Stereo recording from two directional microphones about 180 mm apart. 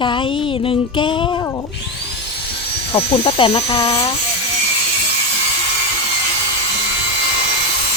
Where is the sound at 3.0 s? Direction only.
35° left (ahead or behind).